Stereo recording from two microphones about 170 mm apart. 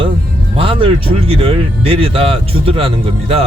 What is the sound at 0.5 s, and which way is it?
Speech, 30° right (ahead or behind).